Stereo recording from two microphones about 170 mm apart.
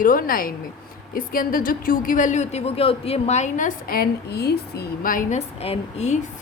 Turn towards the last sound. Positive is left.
turn(degrees=40)  # may be behind; listen again after turning